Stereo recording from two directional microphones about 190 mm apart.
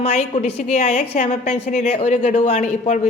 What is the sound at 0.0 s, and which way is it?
A woman's voice, 35° left (ahead or behind).